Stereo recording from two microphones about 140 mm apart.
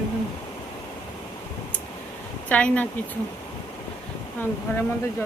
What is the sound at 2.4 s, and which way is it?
Speech, 10° left (ahead or behind).